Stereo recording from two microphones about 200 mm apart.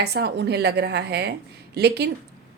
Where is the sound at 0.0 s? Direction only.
55° right (ahead or behind).